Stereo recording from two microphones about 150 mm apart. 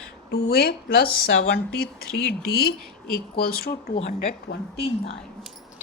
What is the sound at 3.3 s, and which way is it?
Speech, 90° left.